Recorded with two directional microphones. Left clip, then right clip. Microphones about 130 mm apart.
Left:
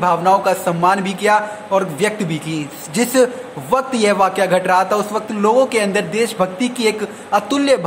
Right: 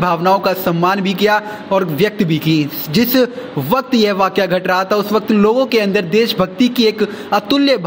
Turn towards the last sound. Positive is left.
turn(degrees=-20)  # may be behind; listen again after turning